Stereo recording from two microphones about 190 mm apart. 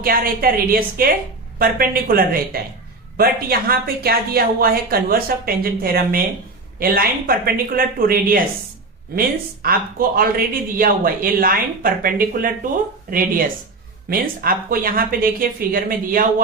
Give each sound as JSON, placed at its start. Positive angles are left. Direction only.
{"t": 0.0, "sound": "speech", "side_deg": -50}
{"t": 9.6, "sound": "speech", "side_deg": -50}